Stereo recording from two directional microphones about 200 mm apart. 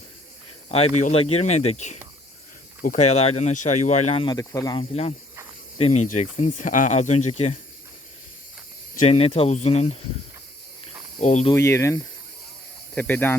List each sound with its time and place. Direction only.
0.7 s speech: 35° left (ahead or behind)
9.0 s speech: 30° left (ahead or behind)
11.2 s speech: 35° left (ahead or behind)
11.5 s speech: 15° left (ahead or behind)